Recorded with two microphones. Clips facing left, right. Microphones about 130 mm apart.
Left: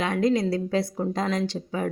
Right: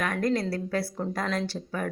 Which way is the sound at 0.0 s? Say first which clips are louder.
Left 4 dB; 20° left (ahead or behind).